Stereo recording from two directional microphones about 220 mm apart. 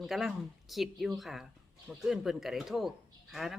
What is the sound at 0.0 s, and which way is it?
Speech, centre (ahead or behind).